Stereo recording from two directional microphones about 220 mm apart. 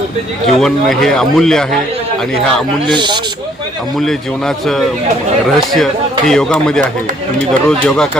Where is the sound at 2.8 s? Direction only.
20° right (ahead or behind).